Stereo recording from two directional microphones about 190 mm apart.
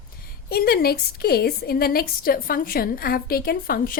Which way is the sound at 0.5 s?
55° left (ahead or behind).